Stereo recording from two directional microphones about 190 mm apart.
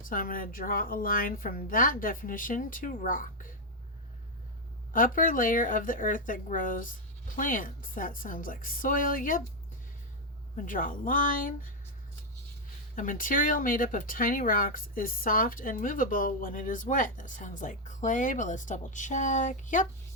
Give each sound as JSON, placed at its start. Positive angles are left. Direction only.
{"t": 0.1, "sound": "speech", "side_deg": 45}
{"t": 4.9, "sound": "speech", "side_deg": 45}
{"t": 10.7, "sound": "speech", "side_deg": 45}
{"t": 13.0, "sound": "speech", "side_deg": 45}